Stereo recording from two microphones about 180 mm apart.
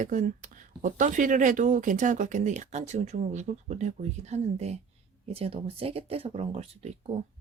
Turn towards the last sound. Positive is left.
turn(degrees=-35)  # may be behind; listen again after turning